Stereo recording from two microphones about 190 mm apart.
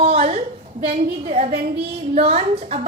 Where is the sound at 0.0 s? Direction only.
30° right (ahead or behind).